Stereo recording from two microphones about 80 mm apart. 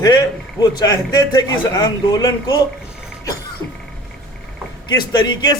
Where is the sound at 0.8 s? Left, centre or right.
Left.